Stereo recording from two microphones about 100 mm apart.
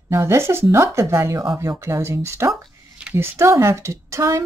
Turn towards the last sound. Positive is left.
turn(degrees=-30)  # may be behind; listen again after turning